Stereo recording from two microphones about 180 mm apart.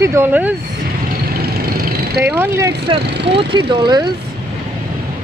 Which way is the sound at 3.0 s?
70° right (ahead or behind).